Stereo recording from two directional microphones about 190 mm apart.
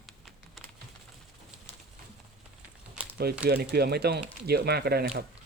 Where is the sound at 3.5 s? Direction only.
55° right (ahead or behind).